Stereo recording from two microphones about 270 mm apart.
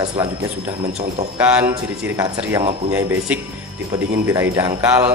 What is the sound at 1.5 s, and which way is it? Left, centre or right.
Speech, centre.